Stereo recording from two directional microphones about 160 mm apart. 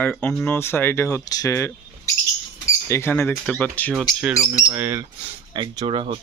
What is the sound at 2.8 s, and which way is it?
Speech, 15° left (ahead or behind).